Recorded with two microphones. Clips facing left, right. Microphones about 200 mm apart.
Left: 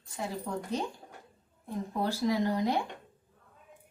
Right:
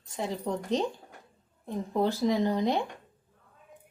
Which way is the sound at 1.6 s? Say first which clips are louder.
Right 5 dB; 20° right (ahead or behind).